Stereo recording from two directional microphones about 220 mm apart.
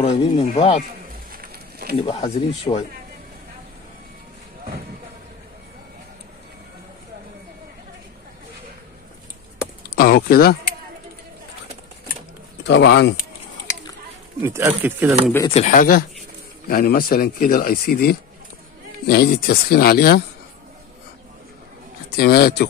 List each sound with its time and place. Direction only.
0.0 s speech: 30° left (ahead or behind)
1.0 s a sound: 40° right (ahead or behind)
2.0 s speech: 25° left (ahead or behind)
9.8 s a sound: 45° left (ahead or behind)
12.6 s speech: 50° left (ahead or behind)
14.4 s speech: 10° right (ahead or behind)
15.4 s speech: 30° left (ahead or behind)
22.1 s speech: 45° left (ahead or behind)